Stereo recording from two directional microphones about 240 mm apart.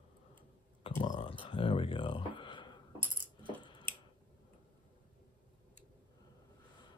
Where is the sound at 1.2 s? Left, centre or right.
Left.